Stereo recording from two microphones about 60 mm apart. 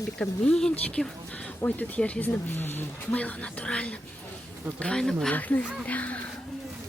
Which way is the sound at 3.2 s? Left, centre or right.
Left.